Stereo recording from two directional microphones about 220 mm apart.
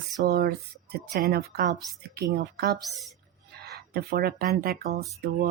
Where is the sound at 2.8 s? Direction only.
Centre (ahead or behind).